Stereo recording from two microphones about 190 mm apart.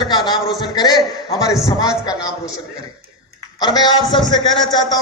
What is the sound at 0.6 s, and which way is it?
A man's voice, 20° left (ahead or behind).